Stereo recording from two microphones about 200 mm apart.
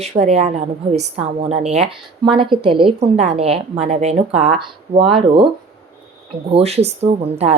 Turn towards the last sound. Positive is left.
turn(degrees=-30)  # may be behind; listen again after turning